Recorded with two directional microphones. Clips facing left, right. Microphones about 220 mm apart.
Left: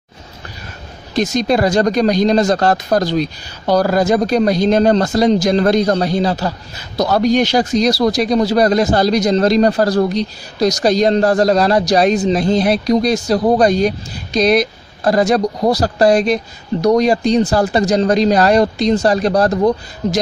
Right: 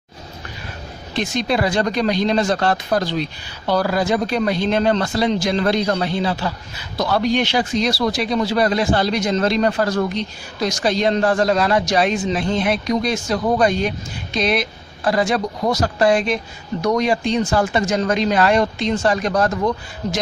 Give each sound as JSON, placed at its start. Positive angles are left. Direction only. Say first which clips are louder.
{"t": 1.1, "sound": "speech", "louder": "left 5 dB", "side_deg": 40}